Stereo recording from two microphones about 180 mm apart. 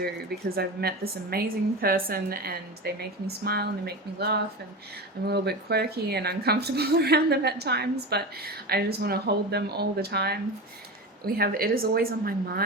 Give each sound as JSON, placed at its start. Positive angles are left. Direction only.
{"t": 0.0, "sound": "a woman's voice", "side_deg": -60}